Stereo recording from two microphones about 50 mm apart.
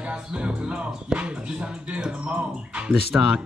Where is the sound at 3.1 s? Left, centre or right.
Centre.